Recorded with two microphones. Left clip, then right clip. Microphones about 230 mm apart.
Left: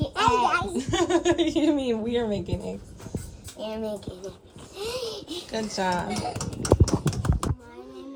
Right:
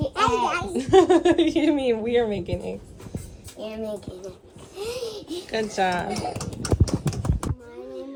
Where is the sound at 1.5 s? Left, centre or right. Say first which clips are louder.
Right 3 dB; centre.